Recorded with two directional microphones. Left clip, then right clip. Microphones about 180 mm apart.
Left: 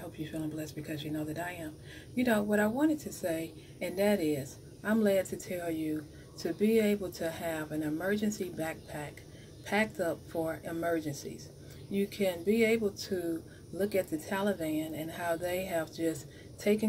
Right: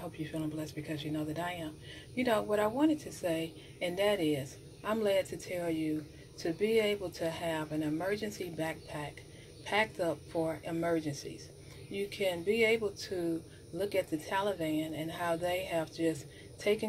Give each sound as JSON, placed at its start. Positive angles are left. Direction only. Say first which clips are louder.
{"t": 0.2, "sound": "a woman's voice", "louder": "left 1 dB", "side_deg": 15}